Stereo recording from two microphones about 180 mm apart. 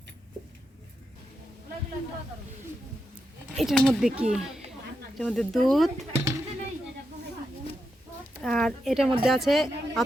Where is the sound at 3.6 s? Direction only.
Centre (ahead or behind).